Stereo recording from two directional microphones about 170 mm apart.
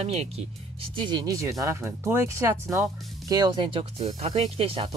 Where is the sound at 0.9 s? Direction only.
25° right (ahead or behind).